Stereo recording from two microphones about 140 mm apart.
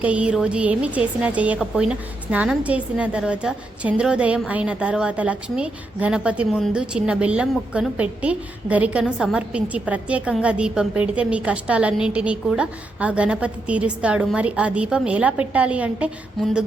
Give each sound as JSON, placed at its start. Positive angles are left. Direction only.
{"t": 0.0, "sound": "a woman's voice", "side_deg": -10}
{"t": 16.4, "sound": "mantra", "side_deg": -5}